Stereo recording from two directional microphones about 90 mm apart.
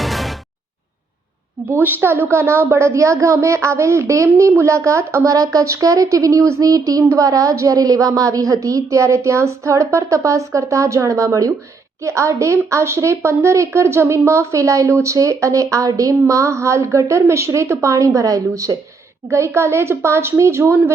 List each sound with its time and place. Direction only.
0.0 s music: centre (ahead or behind)
1.7 s a woman's voice: 25° right (ahead or behind)